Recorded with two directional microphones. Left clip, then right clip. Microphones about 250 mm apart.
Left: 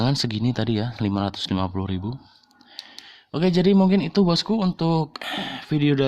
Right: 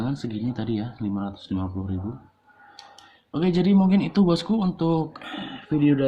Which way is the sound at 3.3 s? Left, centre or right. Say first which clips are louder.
Left 3 dB; left.